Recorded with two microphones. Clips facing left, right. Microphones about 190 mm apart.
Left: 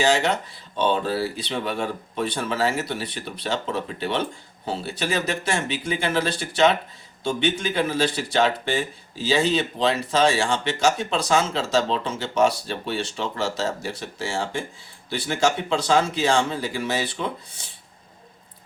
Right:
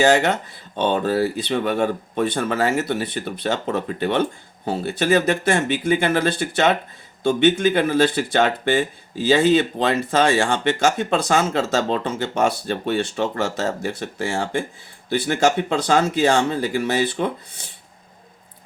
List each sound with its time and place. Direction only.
0.0 s speech: 50° right (ahead or behind)